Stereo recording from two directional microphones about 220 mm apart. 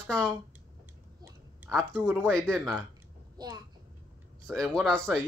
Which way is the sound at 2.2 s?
Centre (ahead or behind).